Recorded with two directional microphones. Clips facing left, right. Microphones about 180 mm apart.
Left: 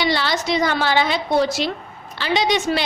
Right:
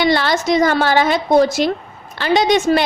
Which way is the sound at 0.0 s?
50° right (ahead or behind).